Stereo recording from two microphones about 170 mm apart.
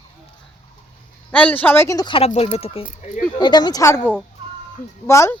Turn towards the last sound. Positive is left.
turn(degrees=15)  # may be behind; listen again after turning